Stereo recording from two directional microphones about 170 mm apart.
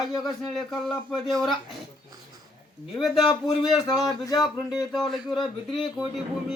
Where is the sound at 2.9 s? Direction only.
Centre (ahead or behind).